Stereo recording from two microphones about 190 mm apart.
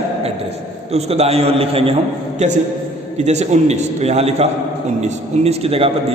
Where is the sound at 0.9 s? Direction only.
35° right (ahead or behind).